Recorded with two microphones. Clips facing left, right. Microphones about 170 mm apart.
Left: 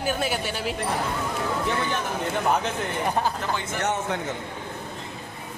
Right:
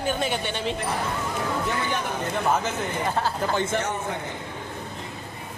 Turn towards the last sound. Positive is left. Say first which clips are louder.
# left 1 dB
turn(degrees=70)  # may be behind; listen again after turning